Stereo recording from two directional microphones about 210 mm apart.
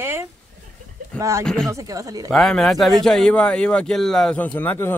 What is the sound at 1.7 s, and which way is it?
Speech, 15° right (ahead or behind).